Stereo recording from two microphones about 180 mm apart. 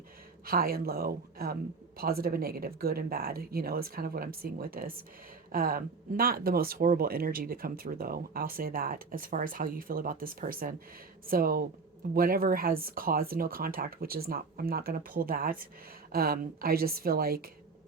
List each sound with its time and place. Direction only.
0.4 s speech: 55° right (ahead or behind)